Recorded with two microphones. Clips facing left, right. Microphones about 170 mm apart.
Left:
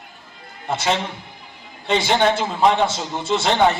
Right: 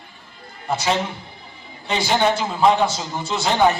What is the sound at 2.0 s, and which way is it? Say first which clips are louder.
A man's voice: even; 25° left (ahead or behind).